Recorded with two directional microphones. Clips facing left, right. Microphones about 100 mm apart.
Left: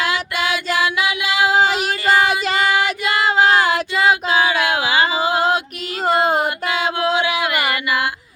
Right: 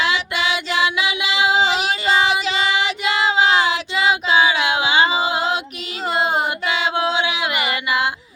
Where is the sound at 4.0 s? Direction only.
45° left (ahead or behind).